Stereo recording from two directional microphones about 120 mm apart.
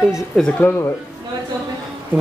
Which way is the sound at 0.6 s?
20° left (ahead or behind).